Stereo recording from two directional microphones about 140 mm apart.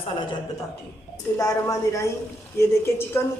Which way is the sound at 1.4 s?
25° left (ahead or behind).